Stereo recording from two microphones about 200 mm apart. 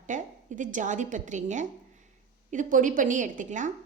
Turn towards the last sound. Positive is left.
turn(degrees=-40)  # may be behind; listen again after turning